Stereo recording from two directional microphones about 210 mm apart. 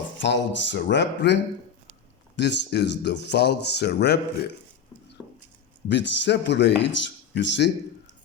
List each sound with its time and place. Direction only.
0.2 s speech: 60° left (ahead or behind)
5.9 s speech: 55° left (ahead or behind)